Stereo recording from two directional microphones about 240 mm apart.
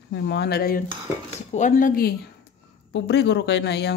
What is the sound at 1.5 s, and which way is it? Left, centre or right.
Speech, left.